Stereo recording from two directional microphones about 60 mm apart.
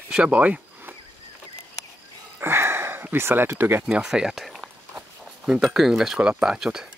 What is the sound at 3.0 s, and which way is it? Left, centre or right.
Speech, right.